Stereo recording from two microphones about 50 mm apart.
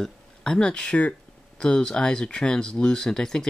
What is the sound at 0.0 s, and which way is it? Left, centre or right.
Speech, centre.